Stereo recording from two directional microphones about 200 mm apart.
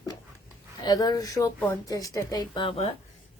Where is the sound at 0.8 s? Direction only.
20° left (ahead or behind).